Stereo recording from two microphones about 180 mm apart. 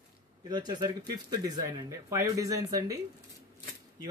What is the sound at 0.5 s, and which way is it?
Speech, 25° right (ahead or behind).